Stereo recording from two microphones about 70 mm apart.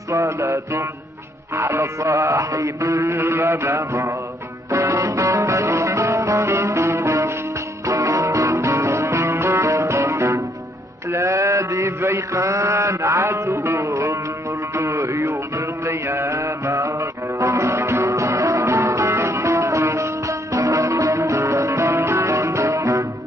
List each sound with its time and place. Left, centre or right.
0.1 s music: right
11.1 s mantra: right
12.0 s music: right